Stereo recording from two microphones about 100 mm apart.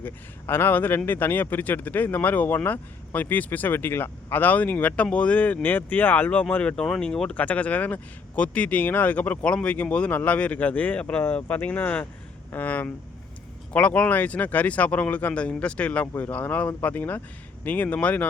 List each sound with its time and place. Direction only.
0.0 s speech: 20° left (ahead or behind)